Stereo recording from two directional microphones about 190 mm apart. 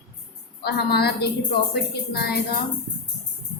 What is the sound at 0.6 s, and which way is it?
A woman's voice, 60° left (ahead or behind).